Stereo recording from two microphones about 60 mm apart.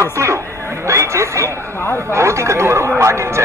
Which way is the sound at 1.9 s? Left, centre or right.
Right.